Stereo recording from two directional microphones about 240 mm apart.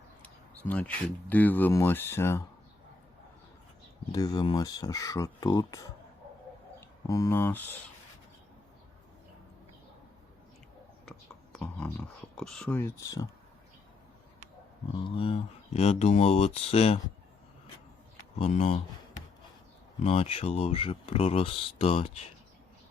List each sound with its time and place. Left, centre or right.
0.2 s speech: centre
4.1 s speech: centre
11.5 s speech: centre
15.0 s speech: left
18.3 s speech: left
20.0 s speech: left